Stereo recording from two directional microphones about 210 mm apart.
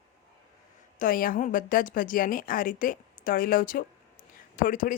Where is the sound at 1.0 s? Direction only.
40° left (ahead or behind).